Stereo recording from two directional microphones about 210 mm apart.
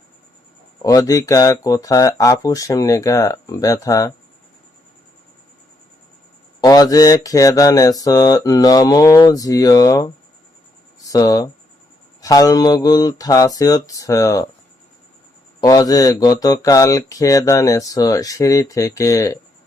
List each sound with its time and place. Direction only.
0.9 s speech: 15° left (ahead or behind)
6.6 s speech: 15° left (ahead or behind)
11.1 s speech: 15° left (ahead or behind)
15.6 s speech: 15° left (ahead or behind)